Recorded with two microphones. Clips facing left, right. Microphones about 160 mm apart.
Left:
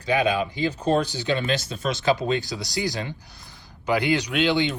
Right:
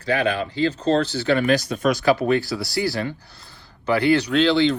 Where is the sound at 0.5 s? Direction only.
15° left (ahead or behind).